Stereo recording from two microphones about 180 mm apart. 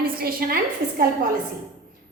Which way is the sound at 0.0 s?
55° right (ahead or behind).